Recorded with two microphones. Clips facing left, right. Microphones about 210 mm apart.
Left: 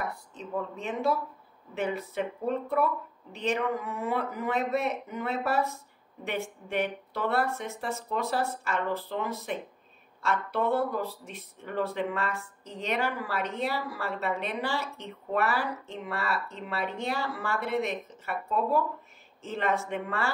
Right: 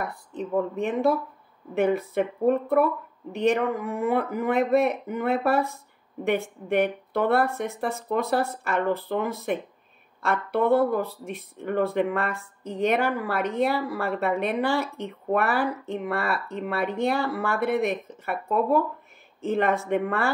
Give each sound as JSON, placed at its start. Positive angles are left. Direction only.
{"t": 0.4, "sound": "speech", "side_deg": -55}